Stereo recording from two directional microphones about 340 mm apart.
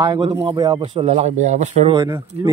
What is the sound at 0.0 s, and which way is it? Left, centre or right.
Speech, centre.